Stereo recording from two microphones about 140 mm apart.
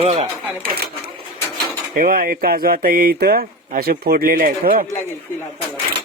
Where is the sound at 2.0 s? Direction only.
85° right.